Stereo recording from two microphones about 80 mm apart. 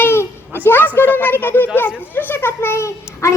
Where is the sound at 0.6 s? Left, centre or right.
Left.